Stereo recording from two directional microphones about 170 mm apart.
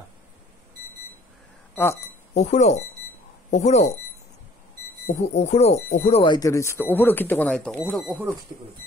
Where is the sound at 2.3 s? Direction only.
40° left (ahead or behind).